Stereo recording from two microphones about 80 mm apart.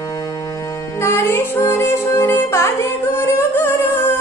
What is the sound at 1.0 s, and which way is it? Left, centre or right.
Music, left.